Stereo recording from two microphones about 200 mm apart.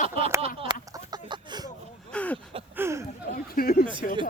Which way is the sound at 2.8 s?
15° right (ahead or behind).